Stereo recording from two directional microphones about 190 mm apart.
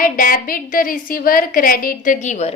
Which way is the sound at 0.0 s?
50° left (ahead or behind).